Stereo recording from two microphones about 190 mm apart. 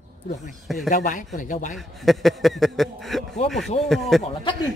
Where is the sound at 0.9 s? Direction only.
45° left (ahead or behind).